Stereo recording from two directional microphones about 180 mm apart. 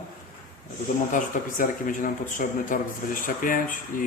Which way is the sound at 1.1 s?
45° left (ahead or behind).